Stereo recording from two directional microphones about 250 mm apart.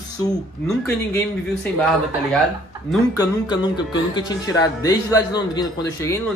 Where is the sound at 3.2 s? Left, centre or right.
Centre.